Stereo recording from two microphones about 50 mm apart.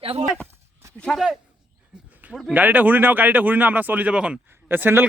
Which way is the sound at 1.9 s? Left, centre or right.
Centre.